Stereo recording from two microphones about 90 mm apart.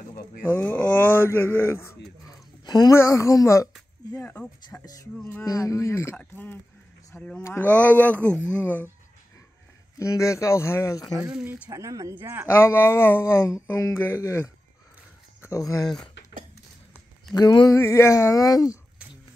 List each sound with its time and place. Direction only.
0.4 s speech: 20° left (ahead or behind)
2.2 s a sound: 50° left (ahead or behind)
2.9 s speech: 30° left (ahead or behind)
4.2 s speech: 20° left (ahead or behind)
5.4 s speech: 40° left (ahead or behind)
6.1 s speech: 20° left (ahead or behind)
7.4 s speech: 25° left (ahead or behind)
9.9 s speech: 35° left (ahead or behind)
11.4 s speech: 15° right (ahead or behind)
11.7 s speech: 40° right (ahead or behind)
12.2 s speech: 25° right (ahead or behind)
12.4 s speech: 30° left (ahead or behind)
17.3 s speech: 50° left (ahead or behind)
17.7 s speech: 30° left (ahead or behind)